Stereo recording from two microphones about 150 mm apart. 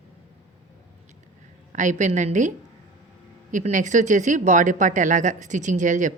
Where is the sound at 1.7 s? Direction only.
55° right (ahead or behind).